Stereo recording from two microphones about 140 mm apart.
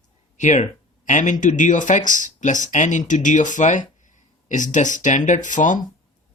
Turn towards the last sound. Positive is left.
turn(degrees=65)  # may be behind; listen again after turning